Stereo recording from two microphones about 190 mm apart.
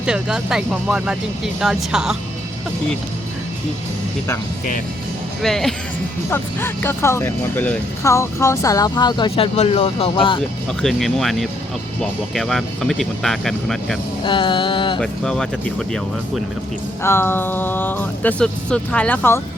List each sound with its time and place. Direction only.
0.0 s speech: 5° right (ahead or behind)
5.4 s speech: centre (ahead or behind)
6.3 s speech: 10° left (ahead or behind); by 10.4 s 25° left (ahead or behind)
10.7 s speech: centre (ahead or behind)
14.3 s music: 25° left (ahead or behind)
15.0 s speech: 5° left (ahead or behind)